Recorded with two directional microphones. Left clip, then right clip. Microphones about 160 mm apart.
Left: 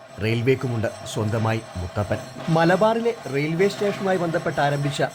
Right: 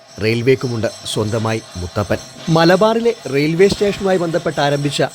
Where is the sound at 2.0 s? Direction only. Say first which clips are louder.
Right 6 dB; 40° right (ahead or behind).